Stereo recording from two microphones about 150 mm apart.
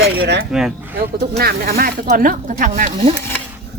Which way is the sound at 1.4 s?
90° right.